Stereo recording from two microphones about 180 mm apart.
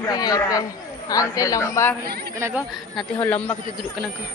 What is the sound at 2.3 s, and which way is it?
Speech, 15° right (ahead or behind).